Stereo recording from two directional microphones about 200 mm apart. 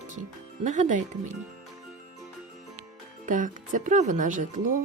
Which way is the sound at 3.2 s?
40° right (ahead or behind).